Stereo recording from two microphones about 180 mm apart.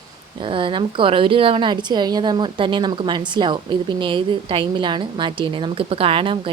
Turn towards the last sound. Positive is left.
turn(degrees=-30)  # may be behind; listen again after turning